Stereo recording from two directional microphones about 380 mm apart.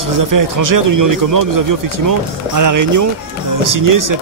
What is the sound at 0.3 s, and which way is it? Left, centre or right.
A man's voice, right.